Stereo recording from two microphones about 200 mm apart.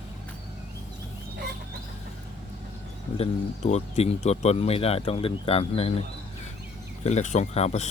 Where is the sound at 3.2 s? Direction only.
30° left (ahead or behind).